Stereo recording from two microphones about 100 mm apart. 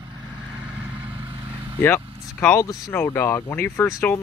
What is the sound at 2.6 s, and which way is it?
Speech, 30° left (ahead or behind).